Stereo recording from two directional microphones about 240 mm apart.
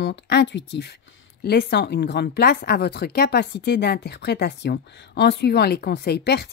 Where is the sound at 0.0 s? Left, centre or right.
Left.